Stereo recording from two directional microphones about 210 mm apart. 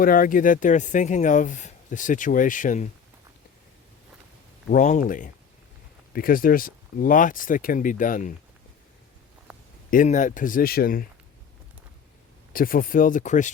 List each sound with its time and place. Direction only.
0.0 s speech: 40° left (ahead or behind)
4.7 s speech: 35° left (ahead or behind)
9.9 s speech: 40° left (ahead or behind)
12.5 s speech: 45° left (ahead or behind)